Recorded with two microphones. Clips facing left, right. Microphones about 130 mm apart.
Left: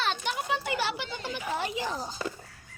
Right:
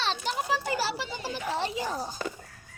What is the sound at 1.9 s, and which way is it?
Speech, 50° right (ahead or behind).